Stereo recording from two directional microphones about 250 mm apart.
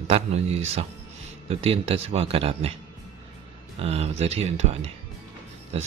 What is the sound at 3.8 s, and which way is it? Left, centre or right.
Speech, right.